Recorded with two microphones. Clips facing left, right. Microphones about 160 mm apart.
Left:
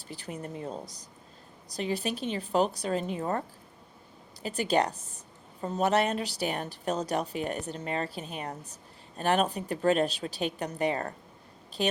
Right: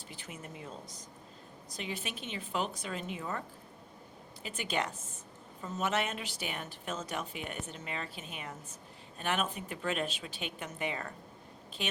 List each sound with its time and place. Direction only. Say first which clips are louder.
0.1 s speech: left 9 dB; 35° left (ahead or behind)
4.4 s speech: left 9 dB; 35° left (ahead or behind)